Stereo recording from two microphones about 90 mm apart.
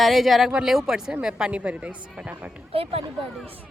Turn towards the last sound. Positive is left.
turn(degrees=-90)